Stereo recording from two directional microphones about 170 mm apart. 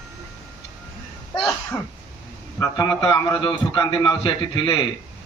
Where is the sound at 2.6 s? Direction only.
20° left (ahead or behind).